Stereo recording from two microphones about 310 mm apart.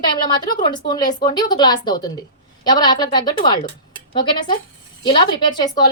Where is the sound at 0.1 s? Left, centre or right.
Centre.